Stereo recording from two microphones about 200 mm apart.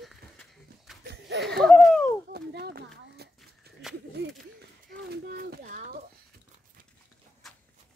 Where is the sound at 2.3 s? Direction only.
55° right (ahead or behind).